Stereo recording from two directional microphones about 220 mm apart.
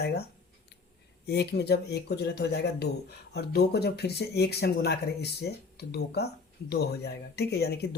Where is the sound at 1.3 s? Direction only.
50° left (ahead or behind).